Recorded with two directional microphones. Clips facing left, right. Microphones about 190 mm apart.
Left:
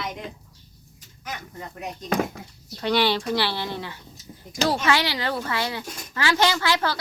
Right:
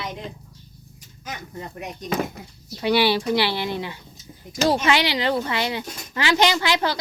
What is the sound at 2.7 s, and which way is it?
Speech, 10° right (ahead or behind).